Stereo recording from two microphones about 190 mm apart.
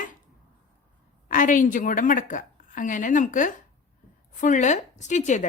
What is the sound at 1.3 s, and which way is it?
A woman's voice, 45° left (ahead or behind).